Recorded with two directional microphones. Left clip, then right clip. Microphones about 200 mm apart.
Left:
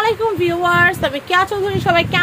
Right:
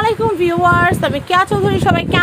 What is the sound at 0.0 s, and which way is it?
A woman's voice, 20° right (ahead or behind).